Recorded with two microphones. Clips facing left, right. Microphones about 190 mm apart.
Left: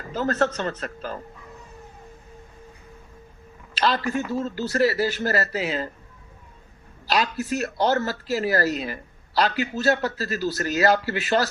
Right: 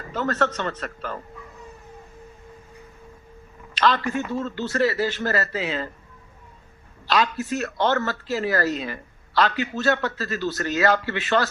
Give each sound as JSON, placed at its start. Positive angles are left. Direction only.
{"t": 0.1, "sound": "a man's voice", "side_deg": 40}
{"t": 3.8, "sound": "a man's voice", "side_deg": 35}
{"t": 7.1, "sound": "a man's voice", "side_deg": 40}